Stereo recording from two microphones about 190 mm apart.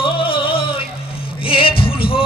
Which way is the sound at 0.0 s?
30° left (ahead or behind).